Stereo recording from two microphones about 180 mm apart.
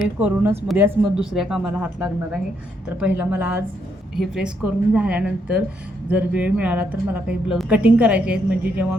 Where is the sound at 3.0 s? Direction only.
10° right (ahead or behind).